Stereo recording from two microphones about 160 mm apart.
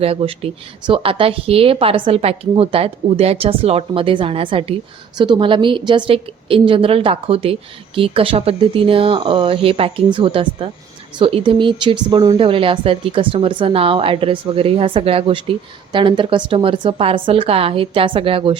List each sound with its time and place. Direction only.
0.0 s speech: 35° right (ahead or behind)